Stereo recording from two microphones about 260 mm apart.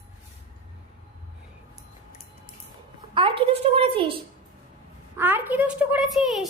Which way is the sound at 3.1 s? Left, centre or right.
Right.